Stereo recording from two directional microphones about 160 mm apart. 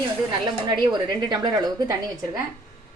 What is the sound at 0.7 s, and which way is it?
A woman's voice, 30° right (ahead or behind).